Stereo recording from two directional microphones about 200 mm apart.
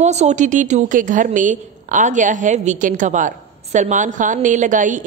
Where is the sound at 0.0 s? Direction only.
35° right (ahead or behind).